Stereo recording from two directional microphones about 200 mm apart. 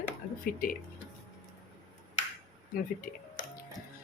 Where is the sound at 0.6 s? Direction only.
45° left (ahead or behind).